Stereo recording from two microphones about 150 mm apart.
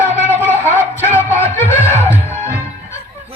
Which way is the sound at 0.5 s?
15° left (ahead or behind).